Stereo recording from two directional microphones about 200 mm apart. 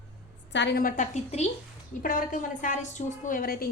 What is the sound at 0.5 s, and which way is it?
A woman's voice, 55° left (ahead or behind).